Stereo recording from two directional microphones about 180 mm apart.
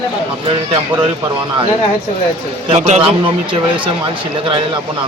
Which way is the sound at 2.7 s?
40° right (ahead or behind).